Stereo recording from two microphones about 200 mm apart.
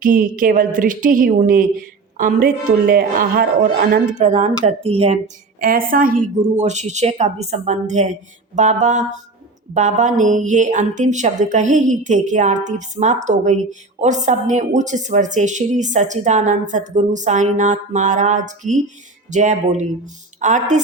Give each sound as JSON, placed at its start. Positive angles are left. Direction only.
{"t": 0.0, "sound": "a woman's voice", "side_deg": -45}
{"t": 5.5, "sound": "a woman's voice", "side_deg": -45}